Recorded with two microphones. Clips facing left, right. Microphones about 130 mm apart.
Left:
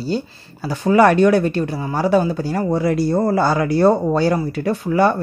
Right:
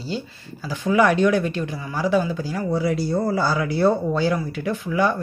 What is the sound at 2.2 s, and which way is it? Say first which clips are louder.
Speech: left 5 dB; 40° left (ahead or behind).